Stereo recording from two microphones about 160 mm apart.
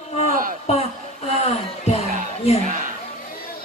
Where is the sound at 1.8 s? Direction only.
40° left (ahead or behind).